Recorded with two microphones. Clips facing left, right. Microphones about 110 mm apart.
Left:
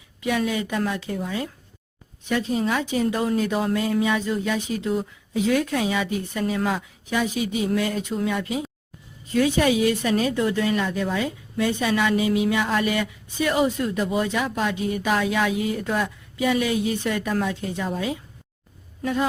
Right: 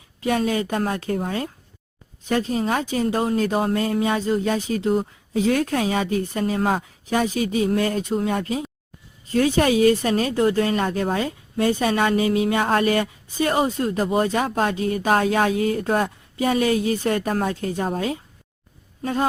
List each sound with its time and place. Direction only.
0.2 s a woman's voice: 40° right (ahead or behind)